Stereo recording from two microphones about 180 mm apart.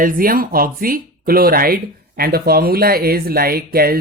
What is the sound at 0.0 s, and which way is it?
Speech, 50° right (ahead or behind).